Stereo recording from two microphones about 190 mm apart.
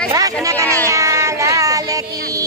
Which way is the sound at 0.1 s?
20° right (ahead or behind).